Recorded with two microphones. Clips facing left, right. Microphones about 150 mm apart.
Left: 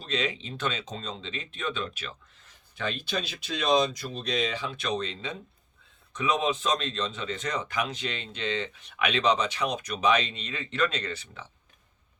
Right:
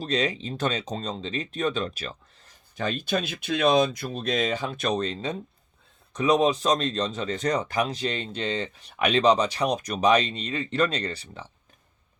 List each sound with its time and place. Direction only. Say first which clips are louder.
0.0 s speech: right 5 dB; 40° right (ahead or behind)